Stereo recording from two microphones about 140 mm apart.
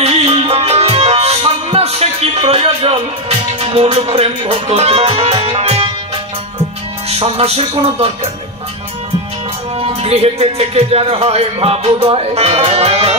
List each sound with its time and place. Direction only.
0.0 s music: 45° right (ahead or behind)
7.1 s music: 45° right (ahead or behind)
9.8 s speech: 45° right (ahead or behind)